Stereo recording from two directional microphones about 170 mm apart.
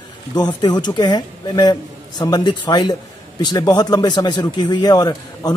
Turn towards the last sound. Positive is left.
turn(degrees=20)  # may be behind; listen again after turning